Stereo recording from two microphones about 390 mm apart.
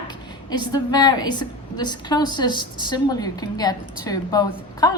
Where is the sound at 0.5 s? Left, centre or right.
Centre.